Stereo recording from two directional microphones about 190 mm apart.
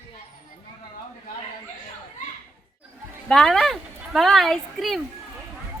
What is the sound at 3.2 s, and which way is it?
Speech, 5° left (ahead or behind).